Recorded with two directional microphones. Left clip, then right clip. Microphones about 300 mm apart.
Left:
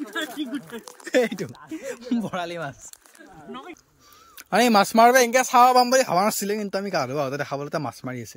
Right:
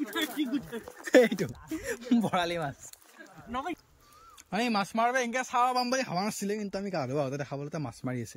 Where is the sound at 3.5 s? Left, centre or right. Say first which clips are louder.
Right 4 dB; centre.